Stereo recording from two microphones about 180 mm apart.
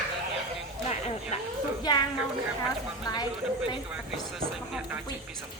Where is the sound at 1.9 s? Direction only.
20° left (ahead or behind).